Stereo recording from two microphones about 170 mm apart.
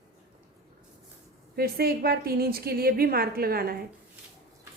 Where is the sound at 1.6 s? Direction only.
65° right (ahead or behind).